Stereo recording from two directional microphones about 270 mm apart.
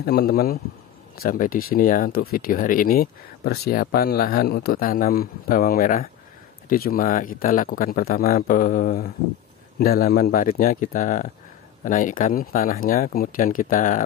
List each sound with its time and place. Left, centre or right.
0.0 s speech: left